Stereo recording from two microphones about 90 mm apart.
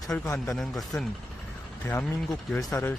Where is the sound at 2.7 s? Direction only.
25° left (ahead or behind).